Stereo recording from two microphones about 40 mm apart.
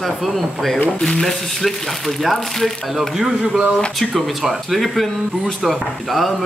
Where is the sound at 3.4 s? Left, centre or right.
Centre.